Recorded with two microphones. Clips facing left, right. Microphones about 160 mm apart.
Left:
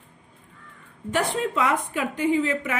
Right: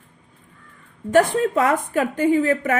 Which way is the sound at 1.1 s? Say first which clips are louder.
Right 8 dB; 45° right (ahead or behind).